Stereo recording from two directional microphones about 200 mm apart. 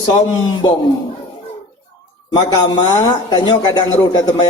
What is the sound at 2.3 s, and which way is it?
Speech, 20° left (ahead or behind).